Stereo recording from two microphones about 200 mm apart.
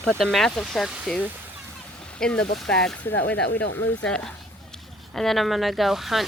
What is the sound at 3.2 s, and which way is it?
Speech, 55° left (ahead or behind).